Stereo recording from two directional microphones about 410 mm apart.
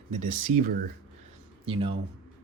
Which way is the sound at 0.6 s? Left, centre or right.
Right.